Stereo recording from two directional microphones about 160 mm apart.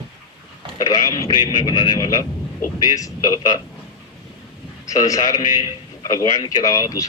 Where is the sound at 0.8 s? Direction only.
25° left (ahead or behind).